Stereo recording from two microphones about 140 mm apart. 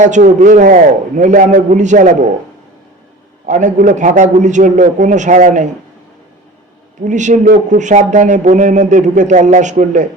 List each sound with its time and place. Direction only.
0.0 s speech: 60° right (ahead or behind)
3.4 s speech: 60° right (ahead or behind)
7.0 s speech: 60° right (ahead or behind)